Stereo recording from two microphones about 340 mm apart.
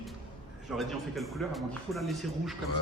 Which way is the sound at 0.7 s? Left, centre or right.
Centre.